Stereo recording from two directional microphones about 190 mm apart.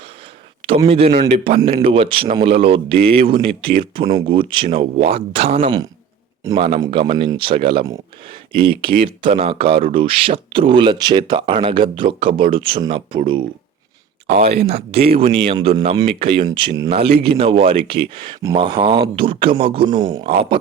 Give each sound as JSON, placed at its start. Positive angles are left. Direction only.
{"t": 0.9, "sound": "speech", "side_deg": -30}
{"t": 14.4, "sound": "speech", "side_deg": -55}
{"t": 14.7, "sound": "speech", "side_deg": -30}